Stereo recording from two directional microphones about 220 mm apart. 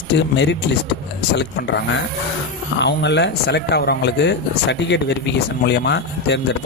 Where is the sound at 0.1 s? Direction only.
50° left (ahead or behind).